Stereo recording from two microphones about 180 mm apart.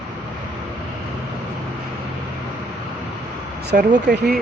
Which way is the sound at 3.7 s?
60° right (ahead or behind).